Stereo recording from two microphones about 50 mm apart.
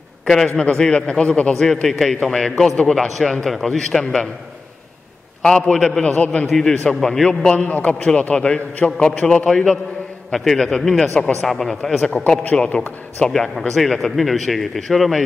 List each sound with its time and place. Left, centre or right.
0.2 s a sound: centre
0.6 s a man's voice: centre
1.5 s a man's voice: centre
5.4 s a man's voice: centre
6.0 s a man's voice: left
6.4 s speech: centre
6.7 s a man's voice: left
7.0 s a man's voice: centre